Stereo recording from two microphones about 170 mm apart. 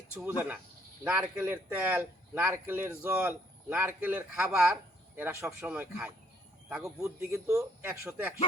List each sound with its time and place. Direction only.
0.1 s speech: 5° right (ahead or behind)